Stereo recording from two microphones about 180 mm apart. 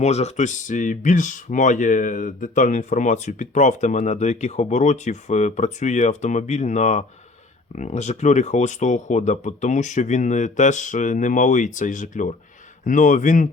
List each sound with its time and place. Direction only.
0.0 s speech: 35° left (ahead or behind)